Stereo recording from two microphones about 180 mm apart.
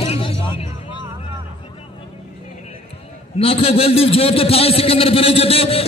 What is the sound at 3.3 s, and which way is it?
A man's voice, 30° left (ahead or behind).